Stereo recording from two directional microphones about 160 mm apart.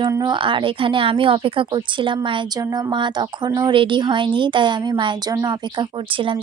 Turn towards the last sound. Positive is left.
turn(degrees=-30)  # may be behind; listen again after turning